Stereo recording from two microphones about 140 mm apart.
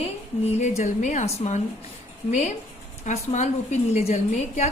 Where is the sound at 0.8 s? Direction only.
60° left (ahead or behind).